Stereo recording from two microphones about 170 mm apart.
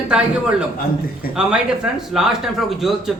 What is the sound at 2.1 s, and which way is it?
A man's voice, centre (ahead or behind).